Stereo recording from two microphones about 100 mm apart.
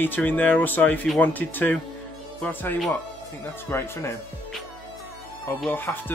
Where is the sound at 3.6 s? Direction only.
25° left (ahead or behind).